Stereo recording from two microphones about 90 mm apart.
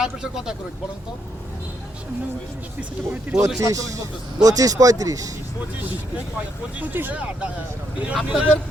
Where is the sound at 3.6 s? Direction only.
40° right (ahead or behind).